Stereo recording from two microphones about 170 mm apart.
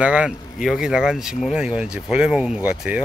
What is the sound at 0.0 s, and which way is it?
Speech, 5° right (ahead or behind).